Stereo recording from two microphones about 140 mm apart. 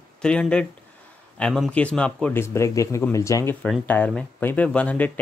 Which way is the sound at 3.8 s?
10° left (ahead or behind).